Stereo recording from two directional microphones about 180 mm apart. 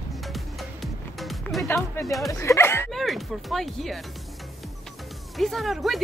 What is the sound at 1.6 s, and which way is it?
Speech, 15° left (ahead or behind).